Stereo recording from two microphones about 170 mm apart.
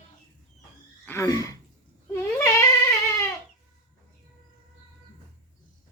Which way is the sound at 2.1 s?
15° left (ahead or behind).